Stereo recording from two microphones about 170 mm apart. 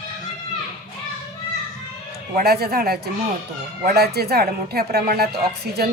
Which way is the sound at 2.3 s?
65° right (ahead or behind).